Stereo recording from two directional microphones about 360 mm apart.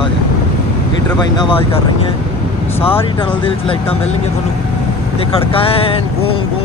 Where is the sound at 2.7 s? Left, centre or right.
Centre.